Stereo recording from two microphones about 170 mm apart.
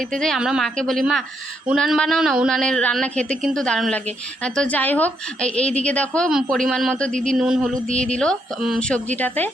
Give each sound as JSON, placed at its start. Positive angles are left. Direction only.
{"t": 0.0, "sound": "a woman's voice", "side_deg": 0}